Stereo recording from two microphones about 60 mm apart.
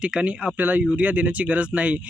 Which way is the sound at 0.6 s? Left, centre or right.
Right.